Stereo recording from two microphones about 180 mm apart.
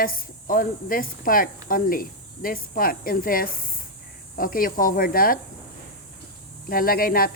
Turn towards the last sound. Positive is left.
turn(degrees=55)  # may be behind; listen again after turning